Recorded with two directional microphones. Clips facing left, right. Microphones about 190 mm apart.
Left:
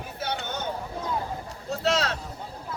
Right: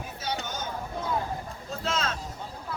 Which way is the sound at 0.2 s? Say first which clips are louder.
Left 2 dB; 60° left (ahead or behind).